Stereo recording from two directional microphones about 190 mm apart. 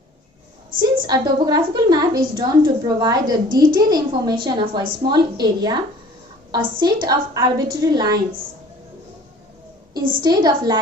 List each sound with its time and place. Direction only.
1.0 s a woman's voice: 20° right (ahead or behind)
10.2 s a woman's voice: 20° right (ahead or behind)